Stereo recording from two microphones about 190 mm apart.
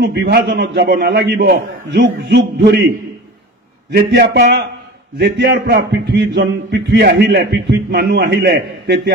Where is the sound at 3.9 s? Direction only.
50° right (ahead or behind).